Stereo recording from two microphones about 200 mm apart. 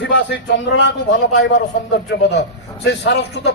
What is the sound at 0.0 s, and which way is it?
A man's voice, 65° left (ahead or behind).